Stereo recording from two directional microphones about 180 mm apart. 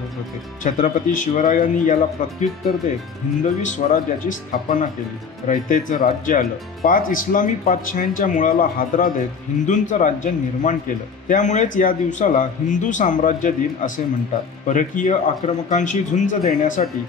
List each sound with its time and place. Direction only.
0.7 s speech: 45° left (ahead or behind)
3.4 s speech: 45° left (ahead or behind)